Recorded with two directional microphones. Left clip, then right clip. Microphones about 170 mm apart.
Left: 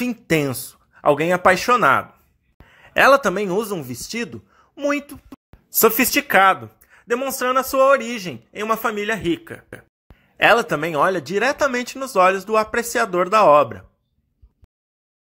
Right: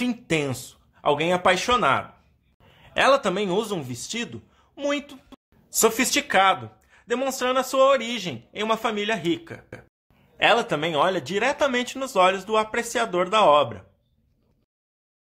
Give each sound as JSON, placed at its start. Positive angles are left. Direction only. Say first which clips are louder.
{"t": 0.3, "sound": "a man's voice", "louder": "left 7 dB", "side_deg": 30}